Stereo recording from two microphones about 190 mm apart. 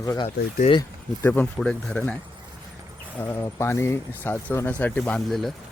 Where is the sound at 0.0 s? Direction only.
20° left (ahead or behind).